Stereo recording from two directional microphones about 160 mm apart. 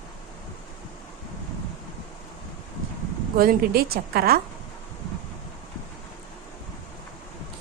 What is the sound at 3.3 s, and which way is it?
A woman's voice, 70° right (ahead or behind).